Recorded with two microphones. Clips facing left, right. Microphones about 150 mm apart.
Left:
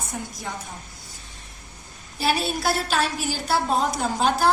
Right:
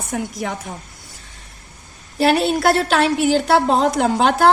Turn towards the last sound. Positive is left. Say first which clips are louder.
# right 6 dB
turn(degrees=-70)  # may be behind; listen again after turning